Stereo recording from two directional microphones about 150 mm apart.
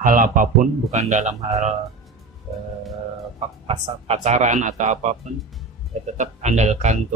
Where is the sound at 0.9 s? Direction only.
50° right (ahead or behind).